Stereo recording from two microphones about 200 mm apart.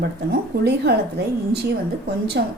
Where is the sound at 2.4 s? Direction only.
55° right (ahead or behind).